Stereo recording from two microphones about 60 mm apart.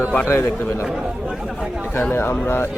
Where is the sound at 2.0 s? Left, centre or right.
Left.